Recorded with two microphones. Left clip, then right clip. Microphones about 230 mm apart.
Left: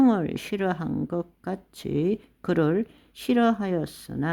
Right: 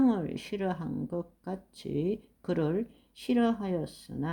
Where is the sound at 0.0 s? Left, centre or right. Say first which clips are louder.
Left 6 dB; left.